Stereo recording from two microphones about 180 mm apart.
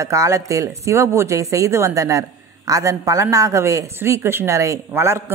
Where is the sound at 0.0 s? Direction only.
15° right (ahead or behind).